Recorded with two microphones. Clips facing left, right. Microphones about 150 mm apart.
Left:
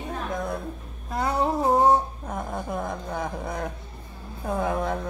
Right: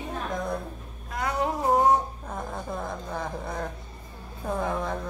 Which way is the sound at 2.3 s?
15° left (ahead or behind).